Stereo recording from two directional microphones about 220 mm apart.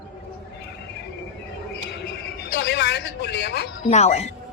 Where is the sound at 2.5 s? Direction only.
50° left (ahead or behind).